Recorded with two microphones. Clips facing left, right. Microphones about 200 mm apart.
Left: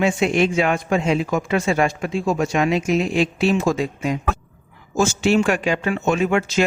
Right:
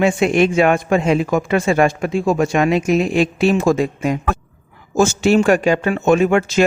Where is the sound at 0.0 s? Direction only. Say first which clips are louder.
Right 4 dB; 55° right (ahead or behind).